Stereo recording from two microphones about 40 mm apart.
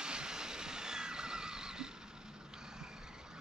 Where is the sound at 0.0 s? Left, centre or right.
Right.